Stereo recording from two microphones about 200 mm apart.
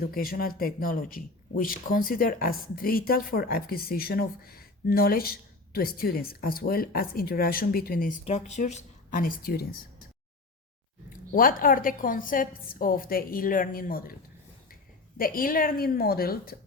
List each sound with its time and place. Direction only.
0.0 s speech: 45° left (ahead or behind)
8.2 s a woman's voice: 35° left (ahead or behind)
11.3 s speech: 45° left (ahead or behind)
15.2 s speech: 45° left (ahead or behind)